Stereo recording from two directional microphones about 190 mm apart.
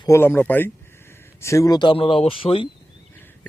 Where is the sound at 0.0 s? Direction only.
15° left (ahead or behind).